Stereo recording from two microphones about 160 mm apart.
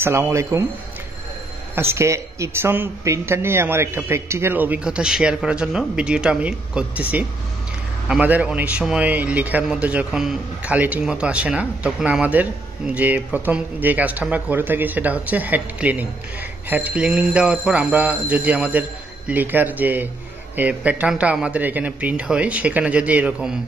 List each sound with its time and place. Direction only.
0.0 s speech: 15° right (ahead or behind)
1.8 s speech: 15° right (ahead or behind)